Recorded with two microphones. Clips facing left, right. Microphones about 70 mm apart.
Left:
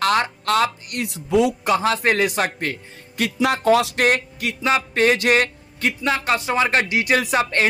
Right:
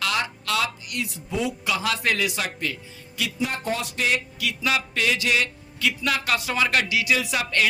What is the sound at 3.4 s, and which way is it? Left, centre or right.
Speech, left.